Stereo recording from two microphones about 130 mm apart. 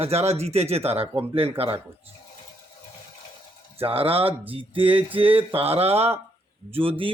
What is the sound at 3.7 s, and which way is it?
Speech, 45° right (ahead or behind).